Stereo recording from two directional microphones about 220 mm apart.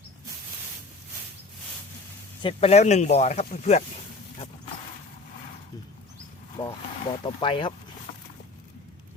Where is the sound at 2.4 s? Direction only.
25° left (ahead or behind).